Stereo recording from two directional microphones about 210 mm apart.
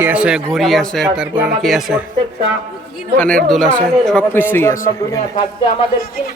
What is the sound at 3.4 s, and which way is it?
A man's voice, centre (ahead or behind).